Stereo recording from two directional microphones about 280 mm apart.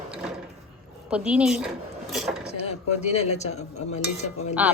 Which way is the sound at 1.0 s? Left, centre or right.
Centre.